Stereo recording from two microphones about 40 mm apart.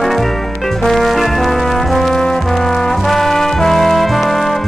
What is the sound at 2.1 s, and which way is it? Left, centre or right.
Brass instrument, centre.